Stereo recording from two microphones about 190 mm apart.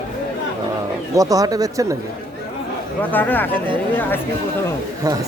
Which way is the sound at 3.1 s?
10° left (ahead or behind).